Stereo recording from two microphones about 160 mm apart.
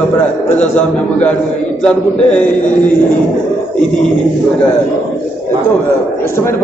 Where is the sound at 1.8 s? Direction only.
5° left (ahead or behind).